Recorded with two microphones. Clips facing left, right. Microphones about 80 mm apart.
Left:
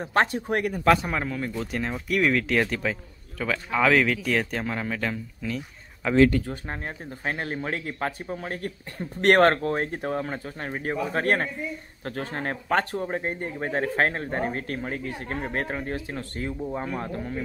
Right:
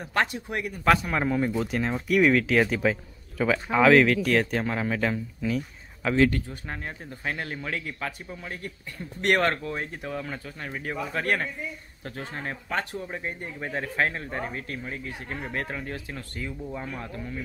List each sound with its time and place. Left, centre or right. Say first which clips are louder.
0.0 s speech: left 4 dB; left
1.2 s speech: right 5 dB; centre
1.6 s speech: right 2 dB; centre
7.2 s speech: left 3 dB; left
12.0 s speech: left 4 dB; left